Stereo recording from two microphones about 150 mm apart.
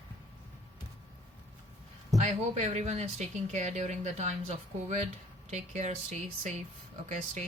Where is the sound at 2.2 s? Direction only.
50° right (ahead or behind).